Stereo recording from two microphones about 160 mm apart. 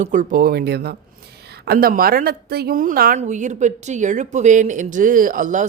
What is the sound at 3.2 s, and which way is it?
Speech, 50° right (ahead or behind).